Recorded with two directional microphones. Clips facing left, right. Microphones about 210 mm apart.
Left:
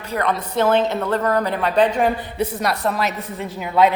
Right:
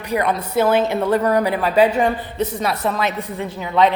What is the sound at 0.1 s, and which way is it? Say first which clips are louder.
A woman's voice: right 2 dB; 10° right (ahead or behind).